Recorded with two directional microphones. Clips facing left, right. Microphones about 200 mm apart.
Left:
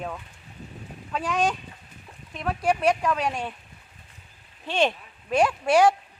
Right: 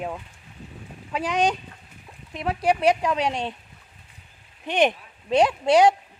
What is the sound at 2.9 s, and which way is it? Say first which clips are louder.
Speech: right 2 dB; 20° right (ahead or behind).